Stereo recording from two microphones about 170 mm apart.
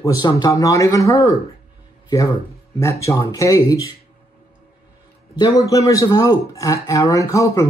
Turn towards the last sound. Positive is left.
turn(degrees=20)  # may be behind; listen again after turning